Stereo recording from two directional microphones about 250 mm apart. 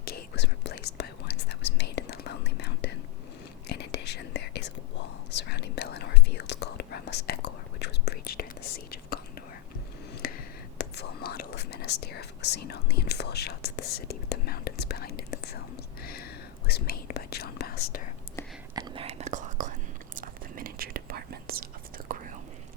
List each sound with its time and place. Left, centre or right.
0.0 s whispering: left
10.2 s a sound: left
10.8 s whispering: left
18.7 s whispering: centre; by 22.4 s right